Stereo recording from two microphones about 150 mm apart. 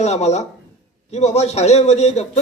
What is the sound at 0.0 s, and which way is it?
A man's voice, 50° left (ahead or behind).